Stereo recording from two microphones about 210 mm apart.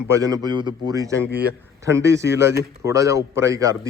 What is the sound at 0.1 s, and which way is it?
Speech, 15° right (ahead or behind).